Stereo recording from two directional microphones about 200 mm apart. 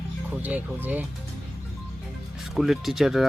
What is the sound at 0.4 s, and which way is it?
Speech, 10° right (ahead or behind).